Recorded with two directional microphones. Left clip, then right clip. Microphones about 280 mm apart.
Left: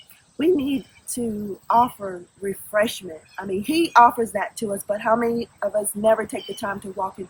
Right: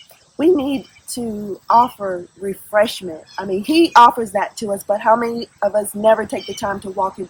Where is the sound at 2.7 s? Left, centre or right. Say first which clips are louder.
Right 6 dB; centre.